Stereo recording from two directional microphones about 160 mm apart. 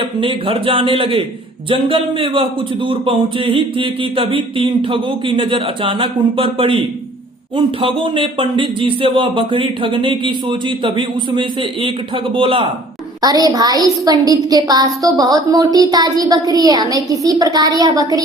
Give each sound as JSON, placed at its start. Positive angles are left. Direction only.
{"t": 0.0, "sound": "speech", "side_deg": -35}
{"t": 13.2, "sound": "a woman's voice", "side_deg": -25}